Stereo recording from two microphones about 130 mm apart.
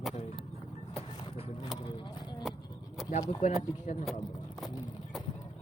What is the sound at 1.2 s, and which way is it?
Vehicle, 45° left (ahead or behind).